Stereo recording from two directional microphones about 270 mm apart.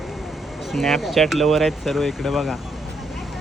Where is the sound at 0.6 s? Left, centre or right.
Centre.